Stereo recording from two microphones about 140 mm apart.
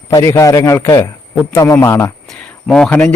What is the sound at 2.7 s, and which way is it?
Speech, 5° left (ahead or behind).